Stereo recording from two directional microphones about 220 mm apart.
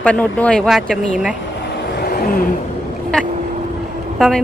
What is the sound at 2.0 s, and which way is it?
Vehicle, 40° left (ahead or behind).